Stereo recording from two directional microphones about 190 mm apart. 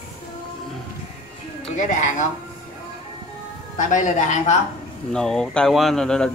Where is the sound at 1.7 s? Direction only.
40° left (ahead or behind).